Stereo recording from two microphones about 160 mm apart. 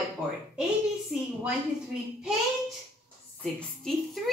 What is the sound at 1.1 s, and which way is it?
Speech, 5° right (ahead or behind).